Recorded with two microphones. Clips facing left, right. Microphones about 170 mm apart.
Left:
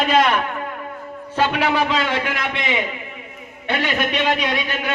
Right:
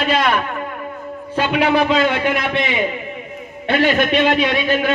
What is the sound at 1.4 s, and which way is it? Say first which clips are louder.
Speech: right 2 dB; 15° right (ahead or behind).